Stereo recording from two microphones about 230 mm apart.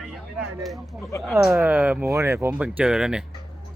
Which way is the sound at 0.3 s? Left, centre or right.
Centre.